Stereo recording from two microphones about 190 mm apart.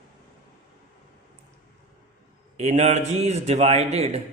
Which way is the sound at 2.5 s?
35° right (ahead or behind).